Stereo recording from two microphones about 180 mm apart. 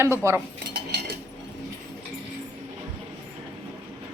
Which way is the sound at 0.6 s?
65° right (ahead or behind).